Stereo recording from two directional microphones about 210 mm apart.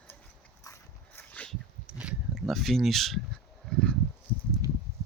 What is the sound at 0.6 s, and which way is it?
Dog, 10° left (ahead or behind).